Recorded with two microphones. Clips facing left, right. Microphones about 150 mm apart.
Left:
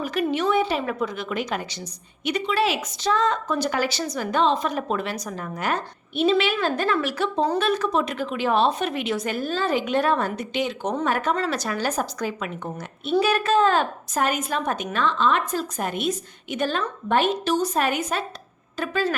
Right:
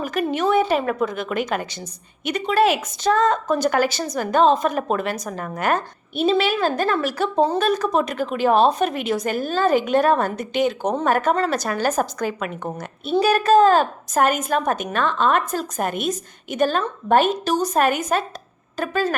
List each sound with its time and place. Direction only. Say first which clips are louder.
0.0 s a woman's voice: right 2 dB; 45° right (ahead or behind)